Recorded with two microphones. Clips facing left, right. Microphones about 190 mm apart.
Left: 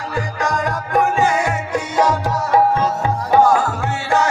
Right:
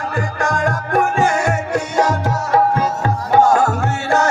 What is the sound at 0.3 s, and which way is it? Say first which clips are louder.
Music: right 2 dB; 50° right (ahead or behind).